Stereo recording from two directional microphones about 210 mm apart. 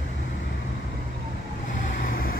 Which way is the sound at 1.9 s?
40° left (ahead or behind).